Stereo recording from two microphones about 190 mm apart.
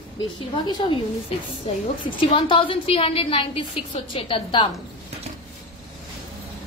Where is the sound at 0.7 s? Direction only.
25° left (ahead or behind).